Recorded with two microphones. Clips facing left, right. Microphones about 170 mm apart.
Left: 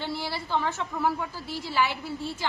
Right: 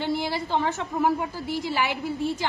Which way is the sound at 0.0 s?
15° right (ahead or behind).